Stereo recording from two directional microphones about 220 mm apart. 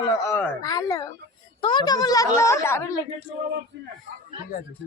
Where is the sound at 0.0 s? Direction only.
15° left (ahead or behind).